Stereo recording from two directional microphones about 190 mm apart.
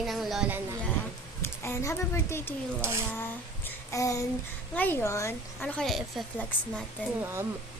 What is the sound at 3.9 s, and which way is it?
A child's voice, 15° left (ahead or behind).